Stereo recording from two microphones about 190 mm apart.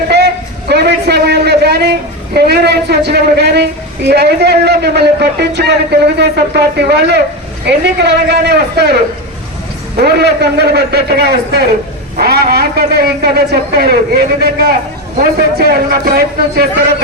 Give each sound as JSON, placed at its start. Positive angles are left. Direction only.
{"t": 0.7, "sound": "a man's voice", "side_deg": -60}
{"t": 10.0, "sound": "a man's voice", "side_deg": -60}